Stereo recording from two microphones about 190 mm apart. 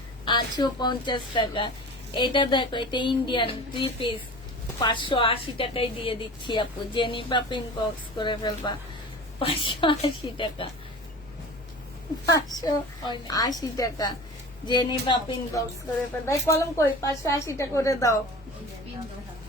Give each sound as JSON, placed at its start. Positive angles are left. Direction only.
{"t": 0.3, "sound": "a woman's voice", "side_deg": 25}
{"t": 12.2, "sound": "a woman's voice", "side_deg": 20}
{"t": 16.1, "sound": "a woman's voice", "side_deg": 10}